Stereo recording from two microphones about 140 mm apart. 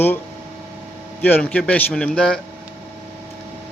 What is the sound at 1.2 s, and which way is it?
A man's voice, 10° left (ahead or behind).